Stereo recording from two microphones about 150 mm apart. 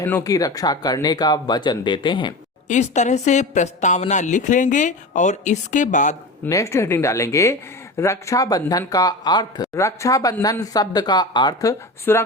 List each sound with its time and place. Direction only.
0.0 s speech: 20° left (ahead or behind)
2.6 s a woman's voice: 50° left (ahead or behind)
6.4 s speech: 20° left (ahead or behind)